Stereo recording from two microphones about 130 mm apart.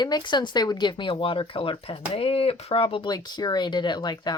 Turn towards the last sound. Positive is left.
turn(degrees=30)  # may be behind; listen again after turning